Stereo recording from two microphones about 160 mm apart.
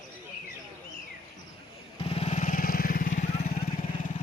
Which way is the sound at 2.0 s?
40° left (ahead or behind).